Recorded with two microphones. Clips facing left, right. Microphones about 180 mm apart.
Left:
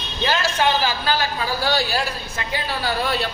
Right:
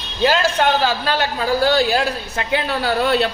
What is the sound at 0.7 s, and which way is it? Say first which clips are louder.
A woman's voice: right 3 dB; 70° right (ahead or behind).